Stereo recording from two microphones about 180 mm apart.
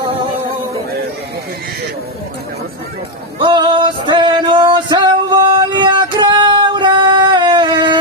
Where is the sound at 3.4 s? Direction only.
25° right (ahead or behind).